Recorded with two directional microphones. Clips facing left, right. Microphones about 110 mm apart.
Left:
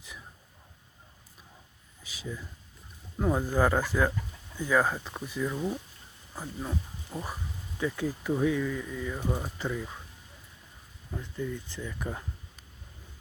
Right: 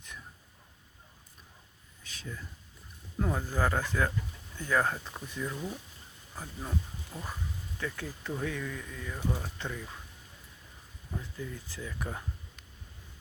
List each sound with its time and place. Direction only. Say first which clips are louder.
2.0 s a sound: left 4 dB; 10° left (ahead or behind)
3.2 s speech: left 5 dB; 15° left (ahead or behind)
6.3 s speech: left 2 dB; 5° left (ahead or behind)
11.1 s speech: left 5 dB; 5° right (ahead or behind)